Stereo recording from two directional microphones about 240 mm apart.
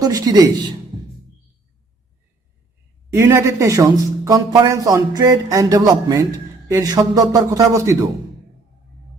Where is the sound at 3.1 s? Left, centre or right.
Centre.